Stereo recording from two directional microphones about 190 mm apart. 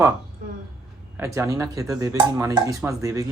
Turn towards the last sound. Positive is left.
turn(degrees=-15)  # may be behind; listen again after turning